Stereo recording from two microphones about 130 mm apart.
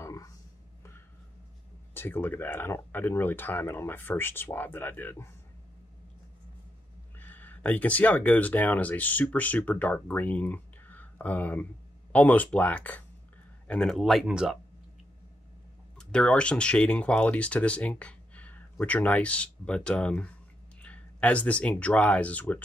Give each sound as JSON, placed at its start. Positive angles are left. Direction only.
{"t": 0.0, "sound": "a sound", "side_deg": 25}
{"t": 2.0, "sound": "speech", "side_deg": 15}
{"t": 7.2, "sound": "speech", "side_deg": 15}
{"t": 16.0, "sound": "speech", "side_deg": 5}